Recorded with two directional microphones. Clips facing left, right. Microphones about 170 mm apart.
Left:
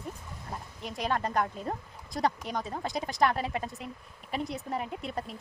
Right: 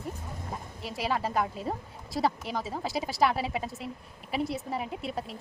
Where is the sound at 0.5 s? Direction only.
5° right (ahead or behind).